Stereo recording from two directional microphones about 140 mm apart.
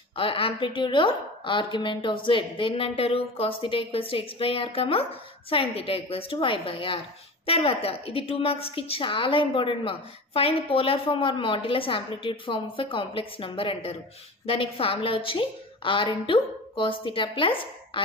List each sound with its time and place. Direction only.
0.1 s a woman's voice: 40° left (ahead or behind)